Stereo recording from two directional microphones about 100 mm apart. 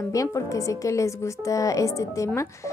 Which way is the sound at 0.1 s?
35° left (ahead or behind).